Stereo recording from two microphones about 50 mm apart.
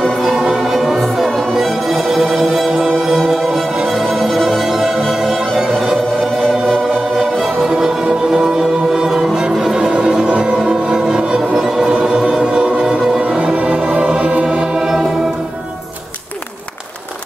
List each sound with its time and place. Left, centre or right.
0.0 s music: centre
1.5 s music: centre
7.4 s music: centre
13.6 s music: right